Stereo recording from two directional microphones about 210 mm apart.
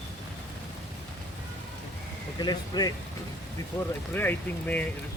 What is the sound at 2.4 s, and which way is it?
Speech, 20° left (ahead or behind).